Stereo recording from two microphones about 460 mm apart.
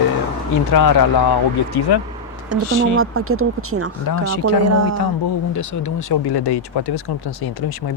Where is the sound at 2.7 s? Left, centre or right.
Left.